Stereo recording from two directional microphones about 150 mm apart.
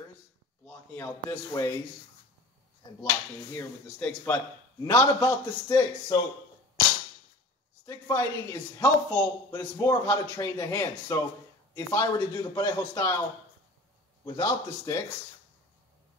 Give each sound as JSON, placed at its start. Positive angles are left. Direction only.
{"t": 0.7, "sound": "a man's voice", "side_deg": 10}
{"t": 3.5, "sound": "speech", "side_deg": 15}
{"t": 7.8, "sound": "speech", "side_deg": 20}
{"t": 14.2, "sound": "speech", "side_deg": 25}